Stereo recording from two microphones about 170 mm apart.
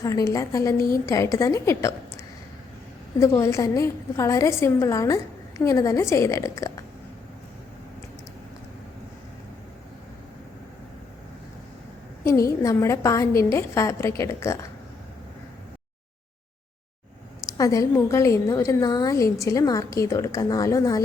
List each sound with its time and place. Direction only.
0.0 s a woman's voice: 20° left (ahead or behind)
3.2 s a woman's voice: 15° left (ahead or behind)
12.2 s a woman's voice: 20° left (ahead or behind)
17.4 s a woman's voice: 20° left (ahead or behind)